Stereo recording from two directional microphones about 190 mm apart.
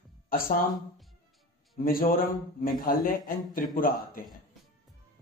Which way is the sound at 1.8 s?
50° left (ahead or behind).